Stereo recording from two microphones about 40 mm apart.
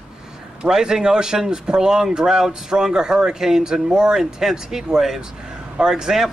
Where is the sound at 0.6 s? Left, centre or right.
Centre.